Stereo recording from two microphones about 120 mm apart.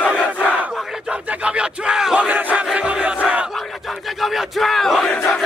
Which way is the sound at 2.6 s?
10° right (ahead or behind).